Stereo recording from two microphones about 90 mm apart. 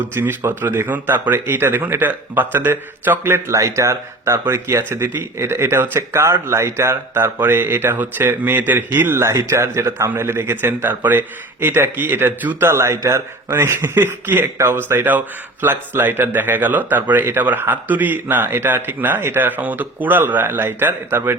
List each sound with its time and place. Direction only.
0.1 s a man's voice: 25° right (ahead or behind)